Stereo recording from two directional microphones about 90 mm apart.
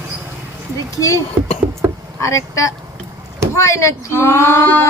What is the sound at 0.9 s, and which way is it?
Speech, 40° left (ahead or behind).